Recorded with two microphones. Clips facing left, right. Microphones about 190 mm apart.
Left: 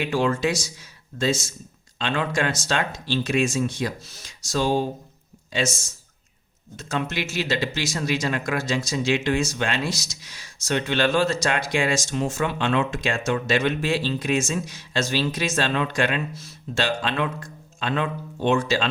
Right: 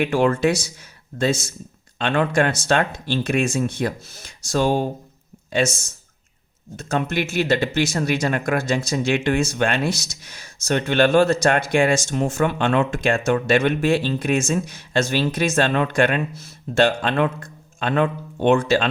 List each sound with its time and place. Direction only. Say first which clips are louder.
0.0 s speech: right 4 dB; 55° right (ahead or behind)